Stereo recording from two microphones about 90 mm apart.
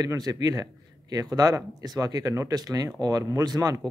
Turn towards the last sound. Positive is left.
turn(degrees=-40)  # may be behind; listen again after turning